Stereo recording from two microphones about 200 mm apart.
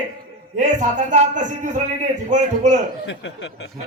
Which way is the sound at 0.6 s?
40° right (ahead or behind).